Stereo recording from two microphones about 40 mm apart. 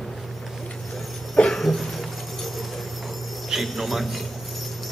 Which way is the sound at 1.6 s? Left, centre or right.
Centre.